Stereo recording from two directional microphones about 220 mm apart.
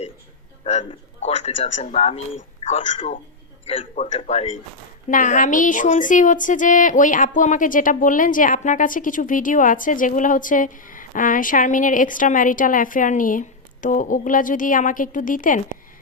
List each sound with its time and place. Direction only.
0.6 s speech: 30° left (ahead or behind)